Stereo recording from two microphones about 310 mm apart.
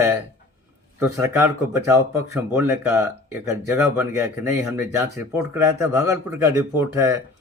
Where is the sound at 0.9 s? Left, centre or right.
Centre.